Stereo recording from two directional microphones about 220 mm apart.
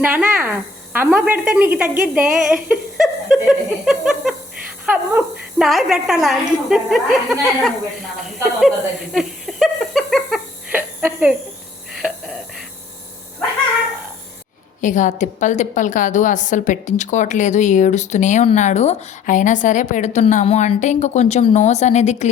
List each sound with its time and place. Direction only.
0.0 s a woman's voice: 5° right (ahead or behind)
9.1 s a sound: centre (ahead or behind)
14.8 s a woman's voice: 35° left (ahead or behind)